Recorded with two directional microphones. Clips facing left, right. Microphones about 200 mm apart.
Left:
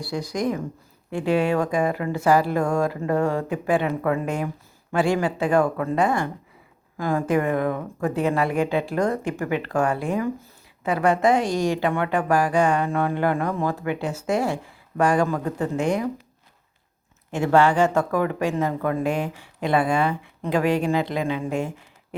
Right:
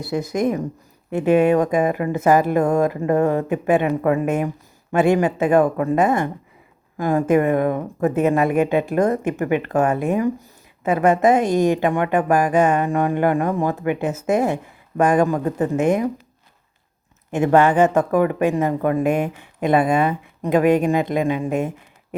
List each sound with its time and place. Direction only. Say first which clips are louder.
0.0 s a woman's voice: right 5 dB; 20° right (ahead or behind)
17.3 s a woman's voice: right 3 dB; 20° right (ahead or behind)